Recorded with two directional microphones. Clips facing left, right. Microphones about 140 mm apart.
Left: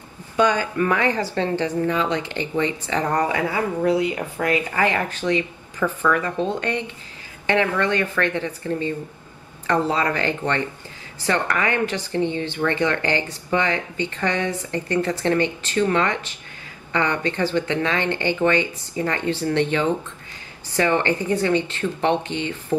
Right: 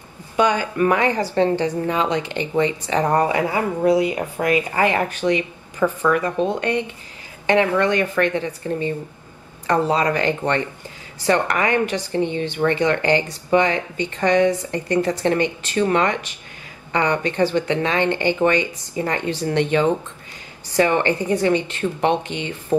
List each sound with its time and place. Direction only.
0.4 s speech: 15° right (ahead or behind)